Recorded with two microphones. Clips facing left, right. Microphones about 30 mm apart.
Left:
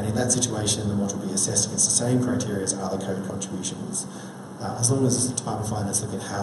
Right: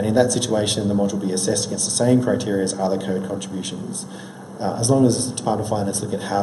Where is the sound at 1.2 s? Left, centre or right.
Right.